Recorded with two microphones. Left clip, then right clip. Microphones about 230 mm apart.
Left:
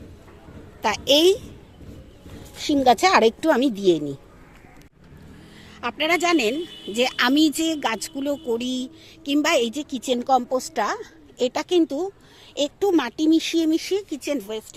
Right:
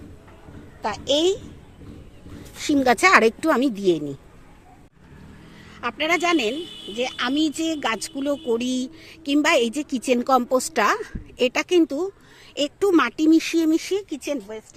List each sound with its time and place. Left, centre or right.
0.8 s a child's voice: centre
2.6 s speech: centre
5.8 s speech: centre
14.3 s speech: centre